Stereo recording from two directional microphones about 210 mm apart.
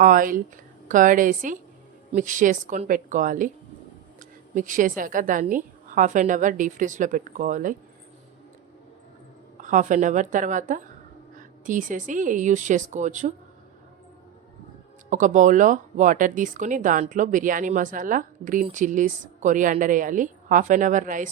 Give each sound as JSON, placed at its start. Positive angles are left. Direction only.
{"t": 0.0, "sound": "a woman's voice", "side_deg": -40}
{"t": 9.6, "sound": "speech", "side_deg": -35}
{"t": 15.1, "sound": "speech", "side_deg": -35}